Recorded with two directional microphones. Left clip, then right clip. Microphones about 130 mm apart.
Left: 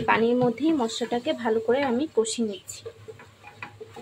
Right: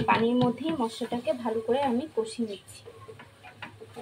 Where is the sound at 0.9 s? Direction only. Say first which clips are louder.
Left 3 dB; 55° left (ahead or behind).